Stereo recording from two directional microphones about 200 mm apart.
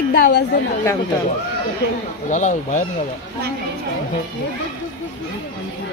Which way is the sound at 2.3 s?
40° left (ahead or behind).